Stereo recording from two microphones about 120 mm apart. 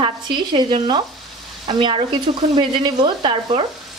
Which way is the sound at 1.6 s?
40° right (ahead or behind).